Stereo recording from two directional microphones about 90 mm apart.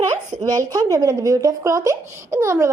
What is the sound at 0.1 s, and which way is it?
A woman's voice, 50° right (ahead or behind).